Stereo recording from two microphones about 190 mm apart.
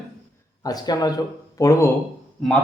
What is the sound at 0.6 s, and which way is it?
A man's voice, 20° left (ahead or behind).